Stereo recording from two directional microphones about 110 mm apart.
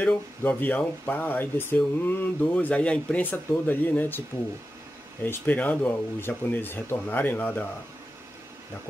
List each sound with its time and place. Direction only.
0.0 s speech: 15° left (ahead or behind)
5.2 s speech: 15° left (ahead or behind)